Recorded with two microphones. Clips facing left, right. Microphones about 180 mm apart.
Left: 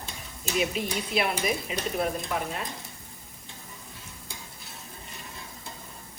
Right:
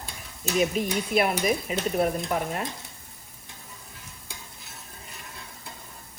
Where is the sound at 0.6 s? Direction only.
45° right (ahead or behind).